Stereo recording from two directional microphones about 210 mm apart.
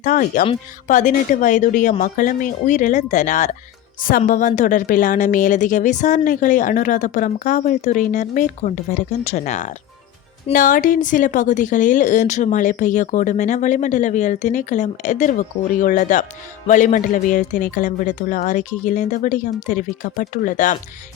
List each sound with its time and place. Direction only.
0.0 s a woman's voice: 40° left (ahead or behind)